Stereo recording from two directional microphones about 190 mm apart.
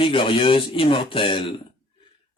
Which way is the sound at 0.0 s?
25° left (ahead or behind).